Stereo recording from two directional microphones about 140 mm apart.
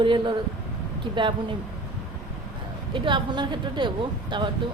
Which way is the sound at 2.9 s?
35° right (ahead or behind).